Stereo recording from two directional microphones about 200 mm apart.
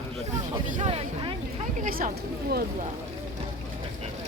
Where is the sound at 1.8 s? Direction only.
40° right (ahead or behind).